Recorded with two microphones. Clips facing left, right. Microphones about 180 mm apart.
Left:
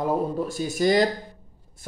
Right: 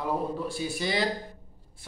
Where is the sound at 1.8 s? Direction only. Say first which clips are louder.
Left 8 dB; 45° left (ahead or behind).